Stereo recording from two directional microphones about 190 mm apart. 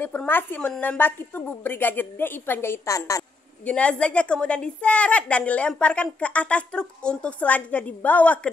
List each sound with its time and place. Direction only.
0.0 s a woman's voice: 10° left (ahead or behind)